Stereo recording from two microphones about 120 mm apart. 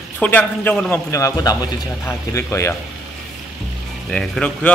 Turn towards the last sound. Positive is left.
turn(degrees=10)  # may be behind; listen again after turning